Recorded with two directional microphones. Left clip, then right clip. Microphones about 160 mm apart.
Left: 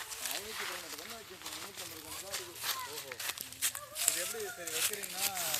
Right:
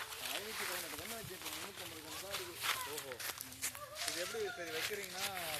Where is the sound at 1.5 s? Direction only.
5° left (ahead or behind).